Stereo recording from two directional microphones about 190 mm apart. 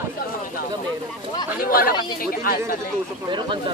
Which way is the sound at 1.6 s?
50° left (ahead or behind).